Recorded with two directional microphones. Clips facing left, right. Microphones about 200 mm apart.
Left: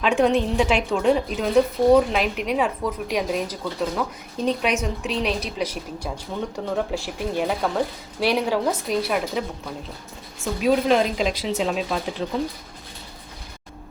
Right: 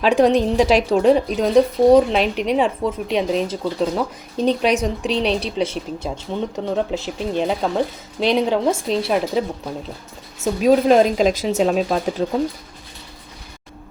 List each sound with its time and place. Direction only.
0.0 s a woman's voice: 35° right (ahead or behind)
10.4 s speech: 40° right (ahead or behind)